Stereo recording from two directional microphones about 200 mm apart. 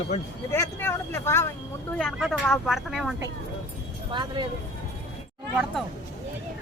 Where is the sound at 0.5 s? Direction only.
15° left (ahead or behind).